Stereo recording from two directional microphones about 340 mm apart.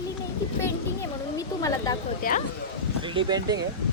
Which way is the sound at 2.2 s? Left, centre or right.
Left.